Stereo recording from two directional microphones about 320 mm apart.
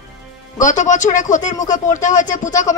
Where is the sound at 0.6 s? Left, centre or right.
Left.